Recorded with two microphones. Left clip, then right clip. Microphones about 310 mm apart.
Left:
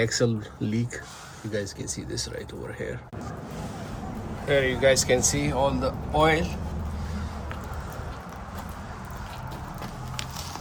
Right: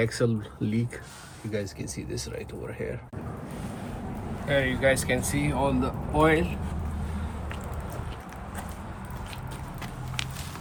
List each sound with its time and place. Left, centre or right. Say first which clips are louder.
0.0 s speech: left 2 dB; centre
4.4 s speech: left 3 dB; centre